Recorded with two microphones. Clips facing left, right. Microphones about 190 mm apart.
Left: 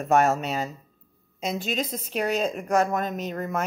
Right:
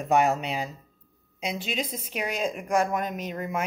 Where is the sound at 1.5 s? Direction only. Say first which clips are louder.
Left 3 dB; 50° left (ahead or behind).